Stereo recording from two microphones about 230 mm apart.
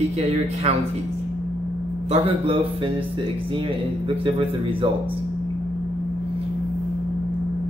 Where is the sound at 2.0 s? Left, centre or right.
Right.